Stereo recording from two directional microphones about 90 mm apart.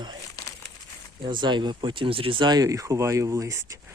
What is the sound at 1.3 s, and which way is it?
Speech, 60° right (ahead or behind).